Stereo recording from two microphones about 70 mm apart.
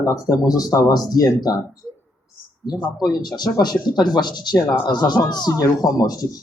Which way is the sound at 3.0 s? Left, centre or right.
Left.